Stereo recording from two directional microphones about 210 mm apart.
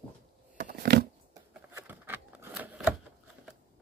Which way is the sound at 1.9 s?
10° right (ahead or behind).